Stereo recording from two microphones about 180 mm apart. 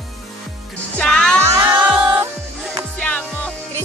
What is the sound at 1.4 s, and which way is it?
Music, 15° right (ahead or behind).